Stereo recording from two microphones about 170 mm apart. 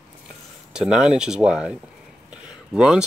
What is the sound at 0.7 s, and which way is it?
Speech, 5° right (ahead or behind).